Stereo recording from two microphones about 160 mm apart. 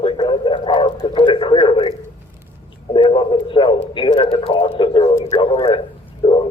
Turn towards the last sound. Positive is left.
turn(degrees=40)  # may be behind; listen again after turning